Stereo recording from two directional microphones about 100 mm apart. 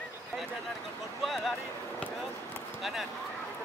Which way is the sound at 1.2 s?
Centre (ahead or behind).